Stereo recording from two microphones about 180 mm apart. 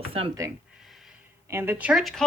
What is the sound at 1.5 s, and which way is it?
Speech, 10° right (ahead or behind).